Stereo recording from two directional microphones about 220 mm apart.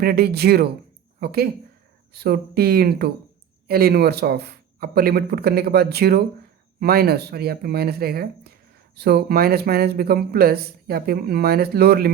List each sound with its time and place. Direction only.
0.0 s speech: 45° right (ahead or behind)